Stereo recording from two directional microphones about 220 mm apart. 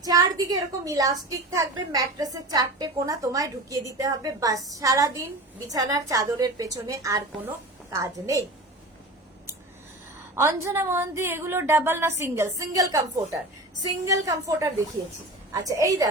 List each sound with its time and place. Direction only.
0.0 s a woman's voice: 15° right (ahead or behind)
10.3 s a woman's voice: 10° right (ahead or behind)